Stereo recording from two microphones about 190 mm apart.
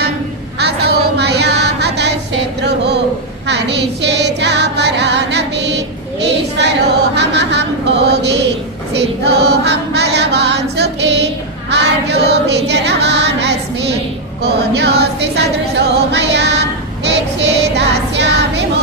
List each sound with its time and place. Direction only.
0.6 s child singing: 60° right (ahead or behind)
2.6 s a sound: 60° right (ahead or behind)
3.4 s music: 65° right (ahead or behind)
7.2 s a sound: 65° right (ahead or behind)
9.2 s choir: 60° right (ahead or behind)
11.7 s singing: 65° right (ahead or behind)
14.4 s music: 60° right (ahead or behind)